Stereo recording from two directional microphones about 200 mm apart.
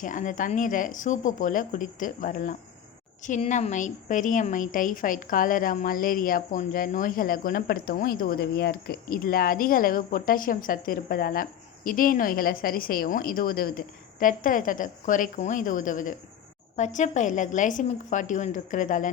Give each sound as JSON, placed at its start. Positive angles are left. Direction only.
{"t": 0.0, "sound": "a woman's voice", "side_deg": 40}